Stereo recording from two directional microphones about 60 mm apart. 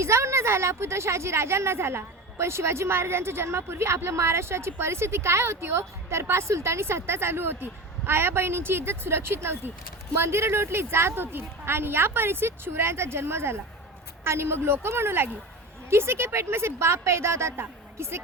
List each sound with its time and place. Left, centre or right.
0.0 s a woman's voice: right